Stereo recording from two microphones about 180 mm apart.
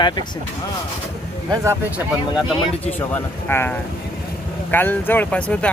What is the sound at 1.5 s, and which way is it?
Speech, 15° right (ahead or behind).